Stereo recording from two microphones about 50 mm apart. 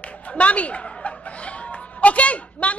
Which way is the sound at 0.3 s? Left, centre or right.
Left.